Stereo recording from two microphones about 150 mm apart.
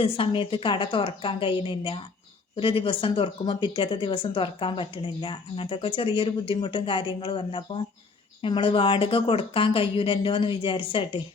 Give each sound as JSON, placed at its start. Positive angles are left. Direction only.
{"t": 0.0, "sound": "speech", "side_deg": 35}